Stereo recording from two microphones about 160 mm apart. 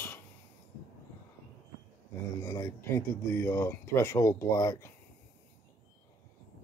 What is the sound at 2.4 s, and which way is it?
Speech, 20° left (ahead or behind).